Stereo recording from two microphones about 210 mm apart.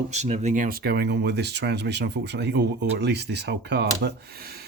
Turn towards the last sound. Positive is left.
turn(degrees=-50)  # may be behind; listen again after turning